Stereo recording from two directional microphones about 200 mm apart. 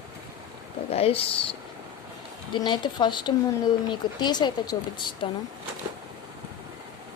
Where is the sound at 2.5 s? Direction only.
20° left (ahead or behind).